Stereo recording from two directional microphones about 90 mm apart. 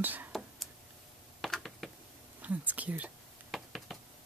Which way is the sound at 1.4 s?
Centre (ahead or behind).